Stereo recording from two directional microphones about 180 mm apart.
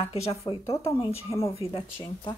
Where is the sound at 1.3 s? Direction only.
30° left (ahead or behind).